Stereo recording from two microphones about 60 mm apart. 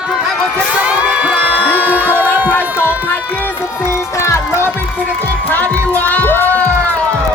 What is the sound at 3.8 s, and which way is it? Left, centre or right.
Music, left.